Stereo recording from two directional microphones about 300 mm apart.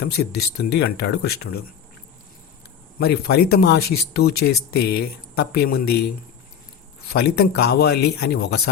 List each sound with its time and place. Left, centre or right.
0.0 s speech: left
3.0 s speech: left
7.1 s speech: left